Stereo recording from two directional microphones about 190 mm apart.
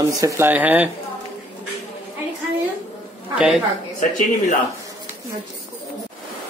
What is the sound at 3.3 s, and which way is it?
Speech, 5° right (ahead or behind).